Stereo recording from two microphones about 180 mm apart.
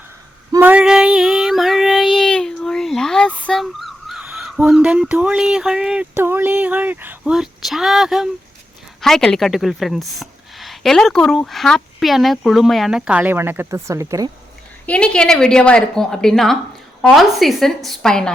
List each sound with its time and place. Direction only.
0.5 s child singing: 10° right (ahead or behind)
4.4 s a woman's voice: centre (ahead or behind); by 14.3 s 15° right (ahead or behind)
14.8 s a woman's voice: 5° left (ahead or behind)